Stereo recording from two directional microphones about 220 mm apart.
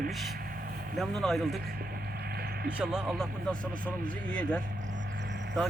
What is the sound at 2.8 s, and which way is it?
Speech, 5° right (ahead or behind).